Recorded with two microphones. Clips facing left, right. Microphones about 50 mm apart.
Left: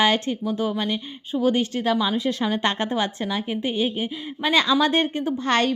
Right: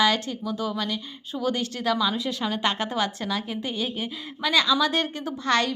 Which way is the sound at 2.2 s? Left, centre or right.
Left.